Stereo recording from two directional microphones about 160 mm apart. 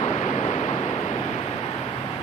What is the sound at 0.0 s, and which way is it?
Waves, 45° left (ahead or behind).